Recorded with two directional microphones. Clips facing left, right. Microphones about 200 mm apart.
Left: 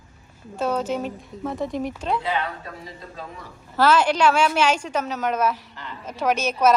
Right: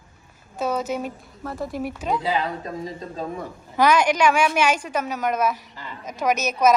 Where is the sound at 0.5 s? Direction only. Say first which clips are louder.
Left 1 dB; 10° right (ahead or behind).